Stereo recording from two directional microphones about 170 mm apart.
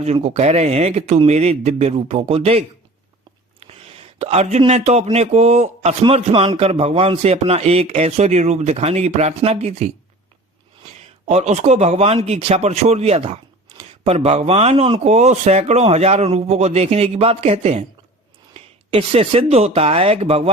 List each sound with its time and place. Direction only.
0.0 s speech: 40° right (ahead or behind)
3.6 s a sound: 35° right (ahead or behind)
4.6 s speech: 40° right (ahead or behind)
11.3 s speech: 40° right (ahead or behind)